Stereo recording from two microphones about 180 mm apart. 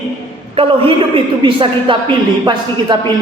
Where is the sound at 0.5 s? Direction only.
30° right (ahead or behind).